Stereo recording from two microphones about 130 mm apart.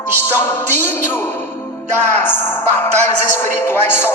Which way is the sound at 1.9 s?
15° left (ahead or behind).